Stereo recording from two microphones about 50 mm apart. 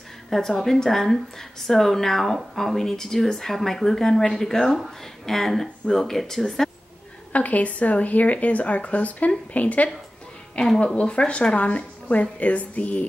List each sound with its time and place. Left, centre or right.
0.3 s speech: centre
7.3 s a woman's voice: left